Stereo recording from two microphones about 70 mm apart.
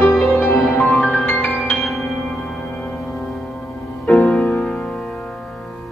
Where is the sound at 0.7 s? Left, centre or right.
Centre.